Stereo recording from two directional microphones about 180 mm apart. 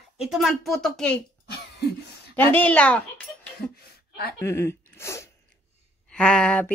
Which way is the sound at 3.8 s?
60° left (ahead or behind).